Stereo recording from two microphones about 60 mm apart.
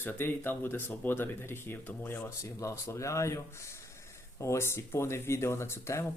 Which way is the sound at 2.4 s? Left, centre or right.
Left.